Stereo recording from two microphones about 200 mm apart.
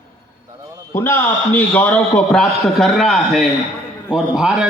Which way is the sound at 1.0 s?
10° left (ahead or behind).